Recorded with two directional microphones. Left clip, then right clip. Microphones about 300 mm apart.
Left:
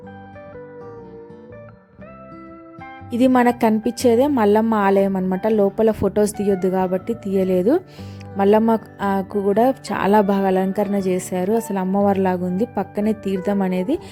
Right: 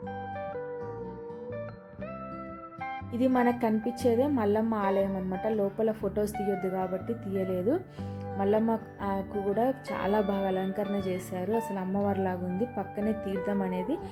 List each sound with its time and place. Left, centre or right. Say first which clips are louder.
3.1 s speech: left 11 dB; left